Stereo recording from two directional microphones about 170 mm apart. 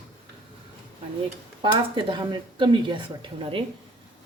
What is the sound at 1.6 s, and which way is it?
A woman's voice, 30° right (ahead or behind).